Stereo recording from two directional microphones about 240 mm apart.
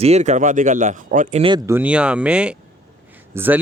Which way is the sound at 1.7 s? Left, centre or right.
Centre.